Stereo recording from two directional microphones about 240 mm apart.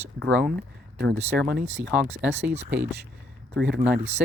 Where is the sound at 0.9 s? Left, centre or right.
Right.